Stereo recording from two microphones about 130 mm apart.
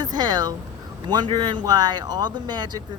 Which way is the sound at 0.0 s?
30° right (ahead or behind).